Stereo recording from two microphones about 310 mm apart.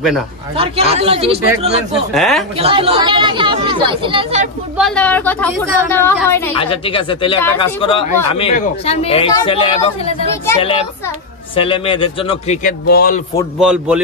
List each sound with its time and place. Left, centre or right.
0.6 s speech: centre
2.1 s speech: centre
2.5 s speech: centre
4.7 s a woman's voice: centre; by 13.2 s left
13.6 s speech: centre